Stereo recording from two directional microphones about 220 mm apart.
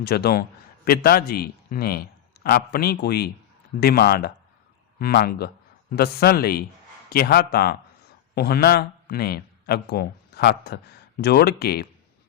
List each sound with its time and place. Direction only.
0.0 s a man's voice: 45° left (ahead or behind)